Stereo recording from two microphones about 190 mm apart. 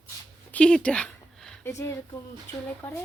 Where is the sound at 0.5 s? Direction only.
5° left (ahead or behind).